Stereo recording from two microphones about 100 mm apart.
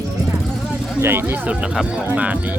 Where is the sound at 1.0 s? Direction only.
20° right (ahead or behind).